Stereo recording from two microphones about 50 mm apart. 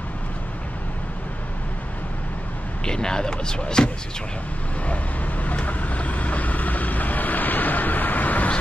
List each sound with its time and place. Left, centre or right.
2.8 s speech: centre
4.8 s vehicle: left